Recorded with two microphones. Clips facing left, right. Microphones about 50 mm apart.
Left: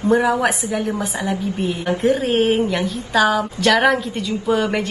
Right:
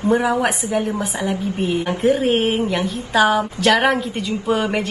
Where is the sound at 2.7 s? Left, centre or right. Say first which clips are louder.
Even; centre.